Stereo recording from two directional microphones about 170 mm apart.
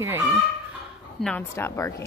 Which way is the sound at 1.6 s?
15° left (ahead or behind).